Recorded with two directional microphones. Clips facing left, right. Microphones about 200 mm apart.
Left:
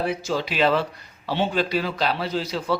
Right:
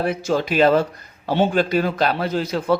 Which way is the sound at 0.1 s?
50° right (ahead or behind).